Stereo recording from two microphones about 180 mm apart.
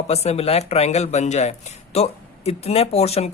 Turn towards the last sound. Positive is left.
turn(degrees=35)  # may be behind; listen again after turning